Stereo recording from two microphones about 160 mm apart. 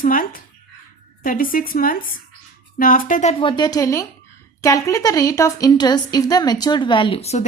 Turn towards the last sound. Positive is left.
turn(degrees=40)  # may be behind; listen again after turning